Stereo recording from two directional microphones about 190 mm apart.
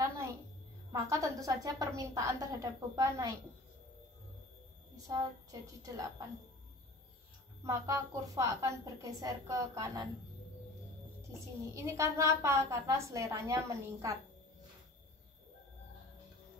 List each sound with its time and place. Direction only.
0.9 s a woman's voice: 15° right (ahead or behind)
4.9 s a woman's voice: 20° right (ahead or behind)
7.6 s a woman's voice: 15° right (ahead or behind)
11.6 s a woman's voice: 15° right (ahead or behind)